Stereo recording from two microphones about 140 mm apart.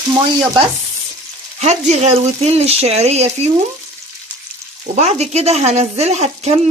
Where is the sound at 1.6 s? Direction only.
50° right (ahead or behind).